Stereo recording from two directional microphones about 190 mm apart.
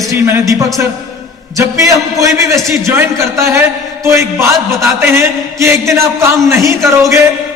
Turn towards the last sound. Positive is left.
turn(degrees=-15)  # may be behind; listen again after turning